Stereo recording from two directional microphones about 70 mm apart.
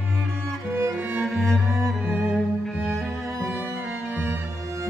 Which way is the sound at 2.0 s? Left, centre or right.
Right.